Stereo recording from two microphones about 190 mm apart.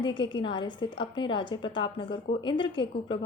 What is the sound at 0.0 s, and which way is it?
A woman's voice, 25° left (ahead or behind).